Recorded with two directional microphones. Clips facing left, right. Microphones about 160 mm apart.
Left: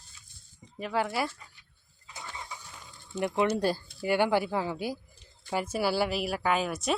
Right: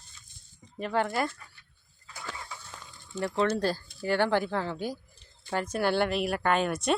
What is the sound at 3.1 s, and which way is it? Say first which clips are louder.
Speech: even; 15° left (ahead or behind).